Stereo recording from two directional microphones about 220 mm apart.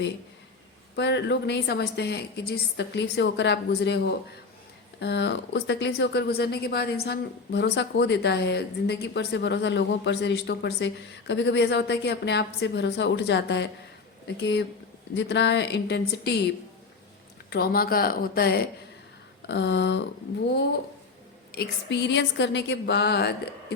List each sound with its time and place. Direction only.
0.9 s speech: 50° left (ahead or behind)
17.5 s speech: 45° left (ahead or behind)
19.5 s a sound: 55° left (ahead or behind)
21.5 s speech: 50° left (ahead or behind)